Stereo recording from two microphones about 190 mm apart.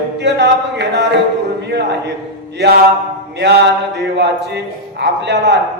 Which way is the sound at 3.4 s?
65° right (ahead or behind).